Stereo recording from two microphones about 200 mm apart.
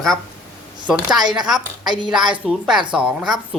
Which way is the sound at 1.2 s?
20° right (ahead or behind).